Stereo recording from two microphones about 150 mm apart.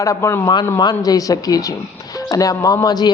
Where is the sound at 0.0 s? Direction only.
20° left (ahead or behind).